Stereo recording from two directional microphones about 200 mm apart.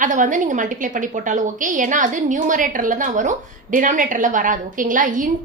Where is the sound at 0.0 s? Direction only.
40° right (ahead or behind).